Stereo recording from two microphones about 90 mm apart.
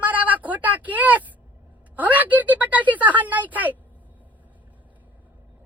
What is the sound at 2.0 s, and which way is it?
A woman's voice, 20° right (ahead or behind).